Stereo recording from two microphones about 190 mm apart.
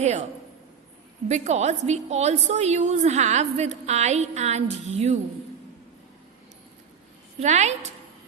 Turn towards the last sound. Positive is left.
turn(degrees=-35)  # may be behind; listen again after turning